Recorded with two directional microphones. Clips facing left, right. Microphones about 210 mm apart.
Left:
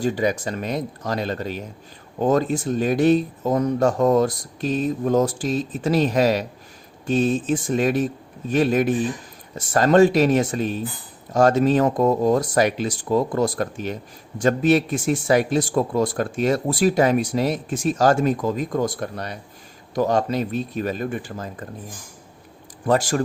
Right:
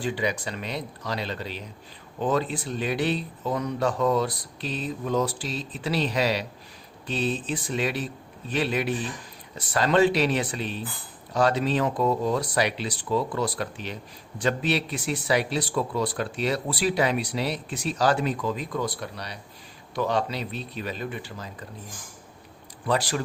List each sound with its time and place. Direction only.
0.0 s speech: 45° left (ahead or behind)
22.9 s speech: 45° left (ahead or behind)